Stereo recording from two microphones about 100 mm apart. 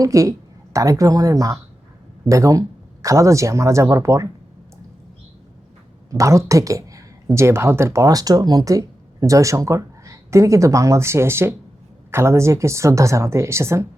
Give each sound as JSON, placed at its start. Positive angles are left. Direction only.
{"t": 0.0, "sound": "speech", "side_deg": -35}
{"t": 6.1, "sound": "a woman's voice", "side_deg": -30}